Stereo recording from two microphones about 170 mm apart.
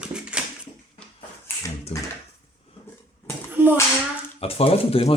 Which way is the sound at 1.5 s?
10° left (ahead or behind).